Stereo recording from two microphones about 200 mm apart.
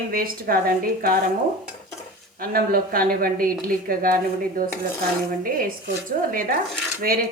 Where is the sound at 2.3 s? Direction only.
45° right (ahead or behind).